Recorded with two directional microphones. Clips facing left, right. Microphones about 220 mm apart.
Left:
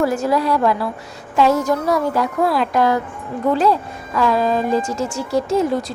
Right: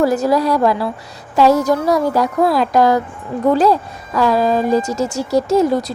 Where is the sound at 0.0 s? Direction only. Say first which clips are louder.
Right 3 dB; 40° right (ahead or behind).